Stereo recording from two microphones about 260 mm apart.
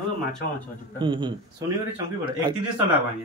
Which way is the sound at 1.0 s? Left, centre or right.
Centre.